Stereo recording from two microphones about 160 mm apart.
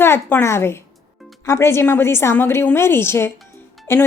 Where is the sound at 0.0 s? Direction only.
15° left (ahead or behind).